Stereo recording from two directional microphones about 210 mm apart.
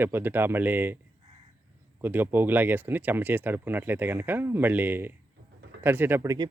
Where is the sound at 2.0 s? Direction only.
10° right (ahead or behind).